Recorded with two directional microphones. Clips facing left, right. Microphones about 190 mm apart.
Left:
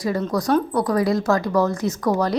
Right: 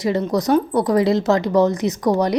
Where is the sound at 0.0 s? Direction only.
20° right (ahead or behind).